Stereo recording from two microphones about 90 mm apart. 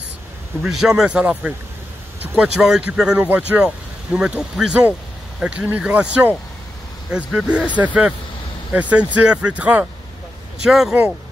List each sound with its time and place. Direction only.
0.6 s speech: 5° right (ahead or behind)
7.3 s speech: 15° right (ahead or behind)
10.6 s speech: 5° right (ahead or behind)